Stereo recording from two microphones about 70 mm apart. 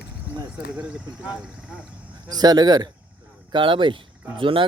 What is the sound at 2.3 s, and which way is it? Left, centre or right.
Speech, right.